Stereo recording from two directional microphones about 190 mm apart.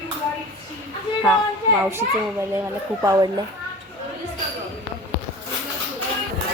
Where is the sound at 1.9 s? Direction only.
10° right (ahead or behind).